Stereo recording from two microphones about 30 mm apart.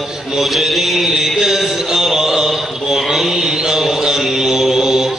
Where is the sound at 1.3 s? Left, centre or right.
Centre.